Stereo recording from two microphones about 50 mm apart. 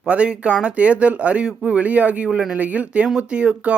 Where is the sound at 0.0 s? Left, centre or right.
Right.